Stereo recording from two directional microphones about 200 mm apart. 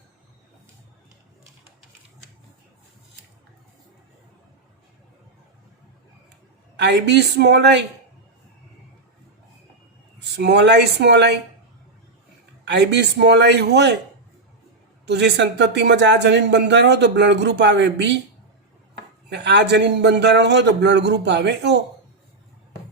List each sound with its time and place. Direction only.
6.7 s speech: 60° right (ahead or behind)
10.2 s speech: 60° right (ahead or behind)
12.6 s speech: 60° right (ahead or behind)
15.0 s speech: 60° right (ahead or behind)
19.3 s speech: 60° right (ahead or behind)